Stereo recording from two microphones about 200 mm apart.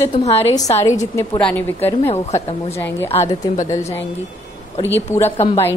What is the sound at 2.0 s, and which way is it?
Speech, 35° left (ahead or behind).